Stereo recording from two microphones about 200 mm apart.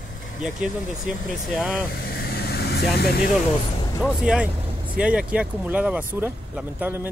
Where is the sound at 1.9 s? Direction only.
50° left (ahead or behind).